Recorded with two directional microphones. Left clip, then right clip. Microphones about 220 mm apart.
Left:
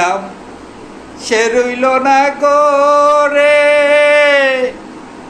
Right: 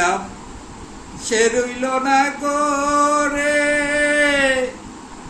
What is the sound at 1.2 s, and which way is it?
Music, 20° right (ahead or behind).